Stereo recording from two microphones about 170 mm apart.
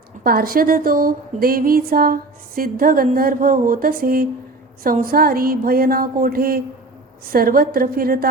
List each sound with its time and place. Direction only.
0.3 s speech: 60° right (ahead or behind)